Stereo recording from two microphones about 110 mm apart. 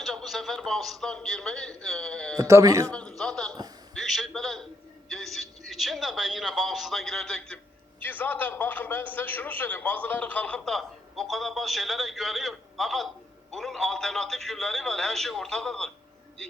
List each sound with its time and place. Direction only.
0.0 s a man's voice: centre (ahead or behind)
2.4 s a man's voice: 30° right (ahead or behind)
2.8 s a man's voice: 10° left (ahead or behind)